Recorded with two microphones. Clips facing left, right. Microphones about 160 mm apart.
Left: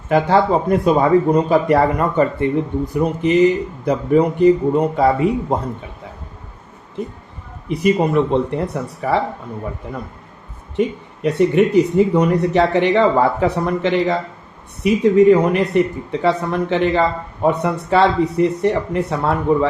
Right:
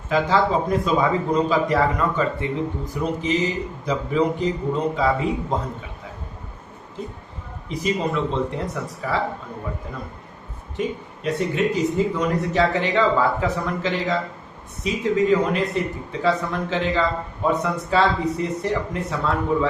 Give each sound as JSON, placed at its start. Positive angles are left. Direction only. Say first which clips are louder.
{"t": 0.1, "sound": "speech", "louder": "left 5 dB", "side_deg": 60}
{"t": 7.7, "sound": "speech", "louder": "left 8 dB", "side_deg": 60}
{"t": 10.8, "sound": "speech", "louder": "left 7 dB", "side_deg": 65}